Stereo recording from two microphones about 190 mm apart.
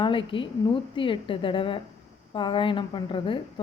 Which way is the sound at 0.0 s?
25° left (ahead or behind).